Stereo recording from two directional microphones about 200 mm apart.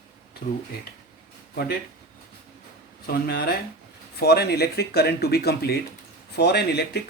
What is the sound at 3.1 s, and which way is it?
Speech, 50° left (ahead or behind).